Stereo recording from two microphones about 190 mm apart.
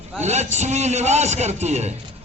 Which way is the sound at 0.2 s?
35° right (ahead or behind).